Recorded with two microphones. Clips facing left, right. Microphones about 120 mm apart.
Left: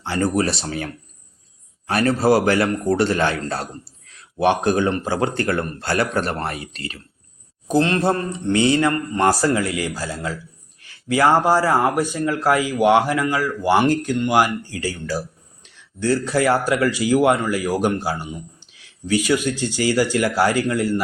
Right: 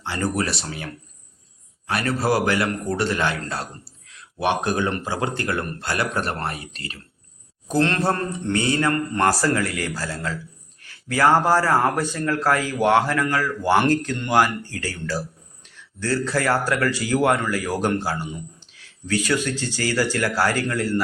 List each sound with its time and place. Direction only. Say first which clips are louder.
0.0 s a man's voice: left 4 dB; 30° left (ahead or behind)
1.9 s a man's voice: left 5 dB; 35° left (ahead or behind)
7.7 s a man's voice: left 3 dB; 15° left (ahead or behind)